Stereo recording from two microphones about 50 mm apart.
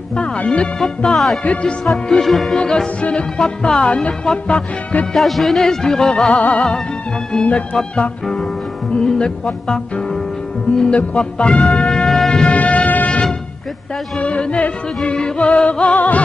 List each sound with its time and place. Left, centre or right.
0.1 s music: left
0.7 s speech: centre
1.4 s music: left
2.0 s speech: centre
3.0 s music: left
5.1 s speech: centre
6.4 s music: left
7.3 s speech: centre
7.7 s music: left
9.0 s speech: centre
11.0 s music: left
12.5 s music: left
14.1 s music: left